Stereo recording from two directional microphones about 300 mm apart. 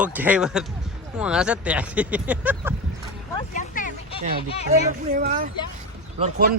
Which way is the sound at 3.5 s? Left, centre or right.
Left.